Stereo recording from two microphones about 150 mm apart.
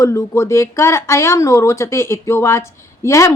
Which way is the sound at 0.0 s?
20° left (ahead or behind).